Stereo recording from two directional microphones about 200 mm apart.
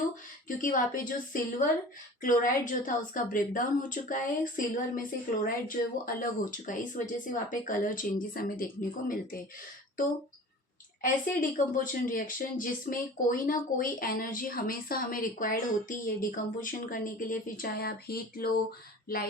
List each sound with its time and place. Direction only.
0.4 s a woman's voice: 40° left (ahead or behind)
11.0 s speech: 40° left (ahead or behind)